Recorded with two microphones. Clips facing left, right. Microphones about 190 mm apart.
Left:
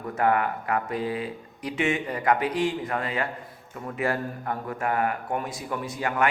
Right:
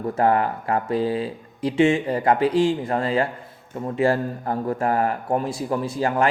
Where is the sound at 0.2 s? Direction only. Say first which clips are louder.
Right 3 dB; 30° right (ahead or behind).